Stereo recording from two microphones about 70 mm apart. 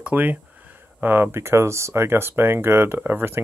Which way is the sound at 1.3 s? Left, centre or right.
Right.